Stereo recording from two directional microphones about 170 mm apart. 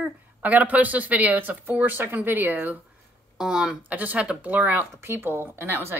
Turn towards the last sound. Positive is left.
turn(degrees=-15)  # may be behind; listen again after turning